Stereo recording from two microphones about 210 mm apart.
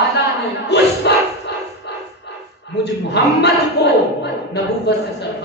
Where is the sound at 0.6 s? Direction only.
50° left (ahead or behind).